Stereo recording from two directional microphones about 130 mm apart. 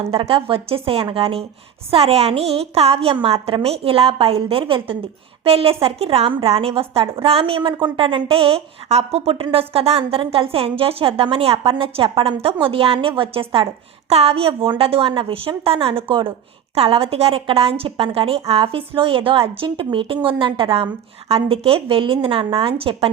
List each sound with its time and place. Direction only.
0.0 s a woman's voice: 45° right (ahead or behind)